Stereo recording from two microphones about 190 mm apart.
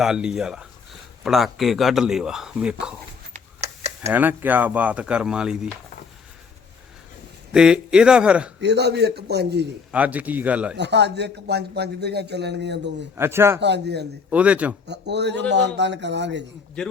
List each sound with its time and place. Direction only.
0.0 s speech: 5° right (ahead or behind)
3.3 s computer keyboard: 35° right (ahead or behind)
4.1 s speech: 10° right (ahead or behind)
7.5 s speech: 5° right (ahead or behind)
8.6 s speech: 60° right (ahead or behind)
9.9 s speech: 10° right (ahead or behind)
10.8 s speech: 65° right (ahead or behind)
13.1 s speech: 15° right (ahead or behind)
13.6 s speech: 65° right (ahead or behind)
14.3 s speech: 5° right (ahead or behind)
14.8 s speech: 65° right (ahead or behind)